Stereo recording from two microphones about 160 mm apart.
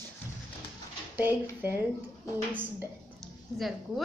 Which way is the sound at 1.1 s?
15° right (ahead or behind).